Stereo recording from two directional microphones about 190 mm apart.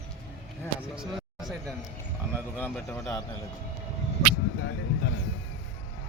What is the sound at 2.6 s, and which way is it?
Speech, 10° left (ahead or behind).